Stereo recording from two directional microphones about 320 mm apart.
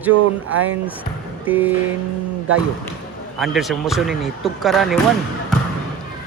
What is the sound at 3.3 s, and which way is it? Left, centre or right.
A man's voice, centre.